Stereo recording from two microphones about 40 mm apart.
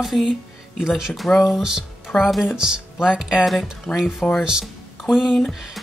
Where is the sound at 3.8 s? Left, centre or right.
Centre.